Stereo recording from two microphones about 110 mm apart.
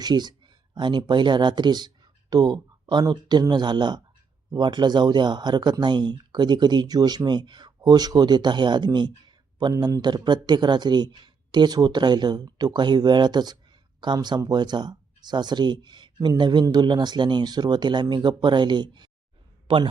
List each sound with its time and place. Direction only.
0.0 s a man's voice: 40° right (ahead or behind)